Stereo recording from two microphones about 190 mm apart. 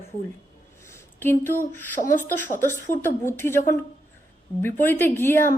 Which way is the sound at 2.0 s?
45° left (ahead or behind).